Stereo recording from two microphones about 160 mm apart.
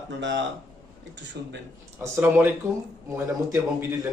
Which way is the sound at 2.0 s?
10° right (ahead or behind).